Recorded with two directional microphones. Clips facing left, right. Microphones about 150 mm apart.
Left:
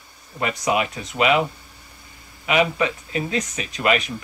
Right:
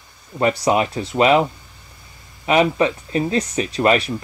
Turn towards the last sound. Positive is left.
turn(degrees=-35)  # may be behind; listen again after turning